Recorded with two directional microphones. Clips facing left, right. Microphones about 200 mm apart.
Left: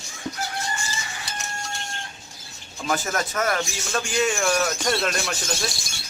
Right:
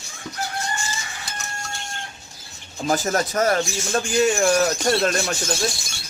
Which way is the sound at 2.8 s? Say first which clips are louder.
Right 4 dB; 35° right (ahead or behind).